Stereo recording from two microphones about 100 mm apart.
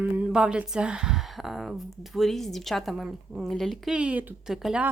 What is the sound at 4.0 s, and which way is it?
Speech, 10° right (ahead or behind).